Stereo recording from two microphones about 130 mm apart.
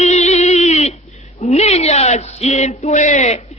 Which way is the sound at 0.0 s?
60° left (ahead or behind).